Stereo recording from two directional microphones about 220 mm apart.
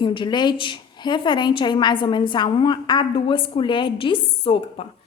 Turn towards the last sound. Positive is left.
turn(degrees=25)  # may be behind; listen again after turning